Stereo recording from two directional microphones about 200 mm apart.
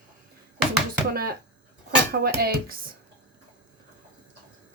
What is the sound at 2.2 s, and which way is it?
Music, 50° right (ahead or behind).